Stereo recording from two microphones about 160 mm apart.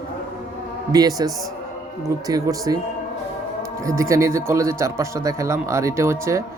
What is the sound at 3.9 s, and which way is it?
Speech, 20° right (ahead or behind).